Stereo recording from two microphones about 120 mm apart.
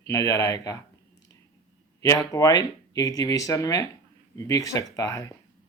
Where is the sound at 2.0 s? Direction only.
25° left (ahead or behind).